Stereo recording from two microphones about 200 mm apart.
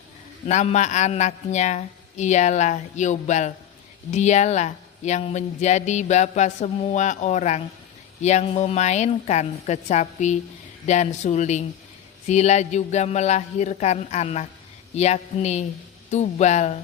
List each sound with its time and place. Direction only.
0.4 s speech: 35° left (ahead or behind)